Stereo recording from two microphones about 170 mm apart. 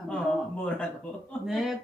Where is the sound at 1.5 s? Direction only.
Centre (ahead or behind).